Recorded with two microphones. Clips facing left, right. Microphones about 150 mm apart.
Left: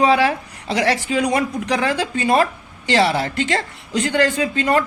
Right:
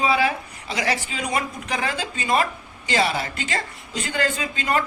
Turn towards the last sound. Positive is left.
turn(degrees=65)  # may be behind; listen again after turning